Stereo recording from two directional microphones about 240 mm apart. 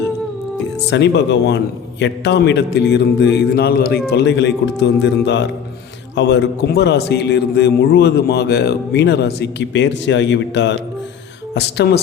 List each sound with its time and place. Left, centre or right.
0.9 s a man's voice: left